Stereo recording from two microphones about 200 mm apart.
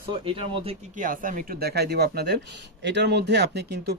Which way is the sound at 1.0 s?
40° right (ahead or behind).